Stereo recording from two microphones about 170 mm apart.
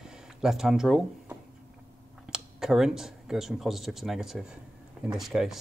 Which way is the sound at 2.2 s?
5° right (ahead or behind).